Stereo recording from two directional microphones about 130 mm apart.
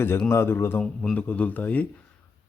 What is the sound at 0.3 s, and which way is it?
Speech, 20° left (ahead or behind).